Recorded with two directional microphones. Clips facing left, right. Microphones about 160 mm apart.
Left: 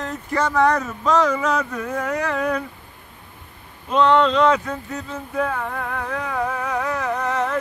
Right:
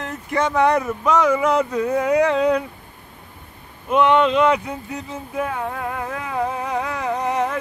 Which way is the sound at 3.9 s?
10° right (ahead or behind).